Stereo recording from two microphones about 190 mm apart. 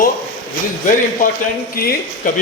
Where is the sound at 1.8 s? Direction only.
50° left (ahead or behind).